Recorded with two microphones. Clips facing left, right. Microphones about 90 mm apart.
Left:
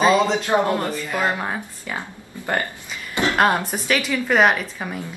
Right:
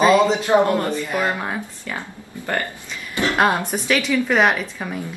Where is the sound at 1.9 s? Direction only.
15° left (ahead or behind).